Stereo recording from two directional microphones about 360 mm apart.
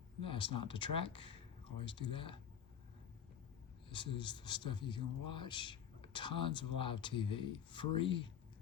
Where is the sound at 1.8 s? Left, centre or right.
Left.